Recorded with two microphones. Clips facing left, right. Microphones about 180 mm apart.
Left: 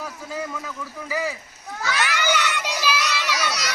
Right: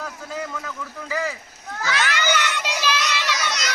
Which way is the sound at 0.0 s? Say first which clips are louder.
Even; 10° left (ahead or behind).